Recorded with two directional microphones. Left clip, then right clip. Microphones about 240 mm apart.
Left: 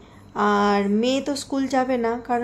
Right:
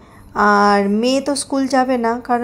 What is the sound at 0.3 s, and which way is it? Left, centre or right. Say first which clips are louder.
Speech: right 7 dB; centre.